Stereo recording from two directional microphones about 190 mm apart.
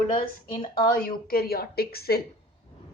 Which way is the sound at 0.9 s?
50° left (ahead or behind).